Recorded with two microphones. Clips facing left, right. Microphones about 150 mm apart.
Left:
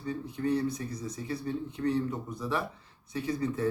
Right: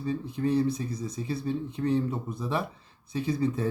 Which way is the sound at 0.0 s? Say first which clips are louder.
Right 3 dB; 30° right (ahead or behind).